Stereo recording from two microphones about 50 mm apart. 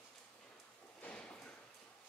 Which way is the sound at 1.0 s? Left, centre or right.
Left.